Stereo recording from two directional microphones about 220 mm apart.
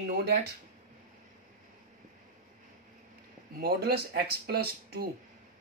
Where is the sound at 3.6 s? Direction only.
45° right (ahead or behind).